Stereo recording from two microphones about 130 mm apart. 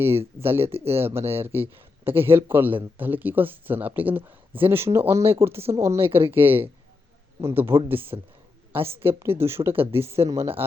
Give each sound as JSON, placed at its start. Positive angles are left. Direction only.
{"t": 0.0, "sound": "a man's voice", "side_deg": -20}